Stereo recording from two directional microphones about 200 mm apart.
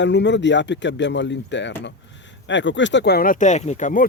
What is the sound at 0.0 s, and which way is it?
Speech, 60° left (ahead or behind).